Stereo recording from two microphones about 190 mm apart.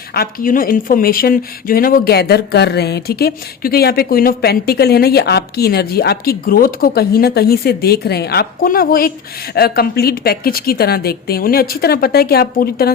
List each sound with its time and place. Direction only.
0.1 s a woman's voice: 50° left (ahead or behind)